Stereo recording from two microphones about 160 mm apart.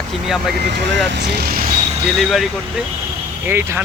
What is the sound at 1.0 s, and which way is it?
Speech, 90° right.